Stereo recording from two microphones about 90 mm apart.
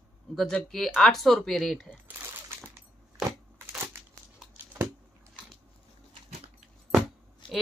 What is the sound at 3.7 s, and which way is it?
Crushing, 30° right (ahead or behind).